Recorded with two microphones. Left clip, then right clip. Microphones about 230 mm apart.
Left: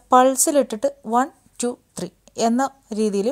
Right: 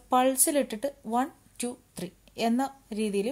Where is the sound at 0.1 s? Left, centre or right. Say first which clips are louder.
Left 9 dB; left.